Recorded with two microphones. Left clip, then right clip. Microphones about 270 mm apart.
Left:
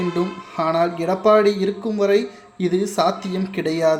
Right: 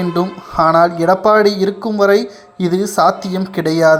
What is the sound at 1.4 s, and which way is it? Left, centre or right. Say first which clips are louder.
Speech: right 5 dB; right.